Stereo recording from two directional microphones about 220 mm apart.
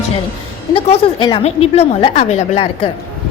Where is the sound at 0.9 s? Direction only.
25° left (ahead or behind).